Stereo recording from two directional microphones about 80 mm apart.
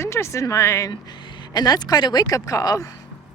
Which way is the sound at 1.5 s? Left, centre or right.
Left.